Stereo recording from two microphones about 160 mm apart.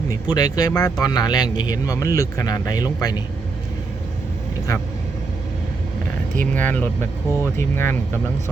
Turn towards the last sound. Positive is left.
turn(degrees=15)  # may be behind; listen again after turning